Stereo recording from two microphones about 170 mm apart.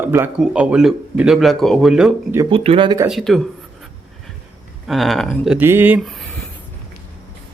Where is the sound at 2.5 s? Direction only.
30° right (ahead or behind).